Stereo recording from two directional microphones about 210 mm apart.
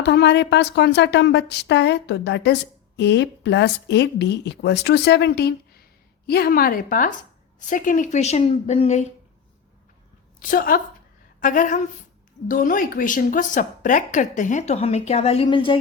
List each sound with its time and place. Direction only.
0.0 s a woman's voice: 50° left (ahead or behind); by 9.0 s 30° left (ahead or behind)
10.4 s a woman's voice: 40° left (ahead or behind); by 15.8 s 25° left (ahead or behind)